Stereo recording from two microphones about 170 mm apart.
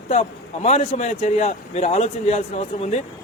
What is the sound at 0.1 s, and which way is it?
A man's voice, 40° left (ahead or behind).